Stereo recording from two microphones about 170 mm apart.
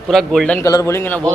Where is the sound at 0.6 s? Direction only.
20° left (ahead or behind).